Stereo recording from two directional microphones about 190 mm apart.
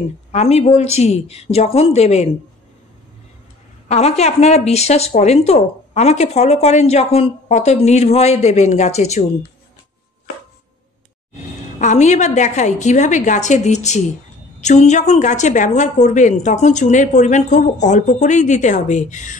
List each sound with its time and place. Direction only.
0.3 s speech: 35° left (ahead or behind)
3.9 s speech: 35° left (ahead or behind)
11.8 s speech: 40° left (ahead or behind)